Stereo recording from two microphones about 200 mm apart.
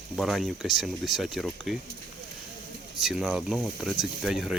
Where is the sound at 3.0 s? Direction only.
Centre (ahead or behind).